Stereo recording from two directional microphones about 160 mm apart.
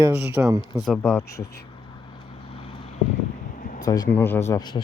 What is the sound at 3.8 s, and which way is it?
Speech, 20° left (ahead or behind).